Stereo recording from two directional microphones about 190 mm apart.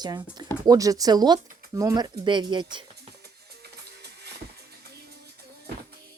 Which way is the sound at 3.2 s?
60° right (ahead or behind).